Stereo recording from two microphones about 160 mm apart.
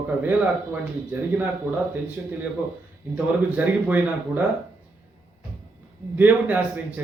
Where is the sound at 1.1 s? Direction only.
10° right (ahead or behind).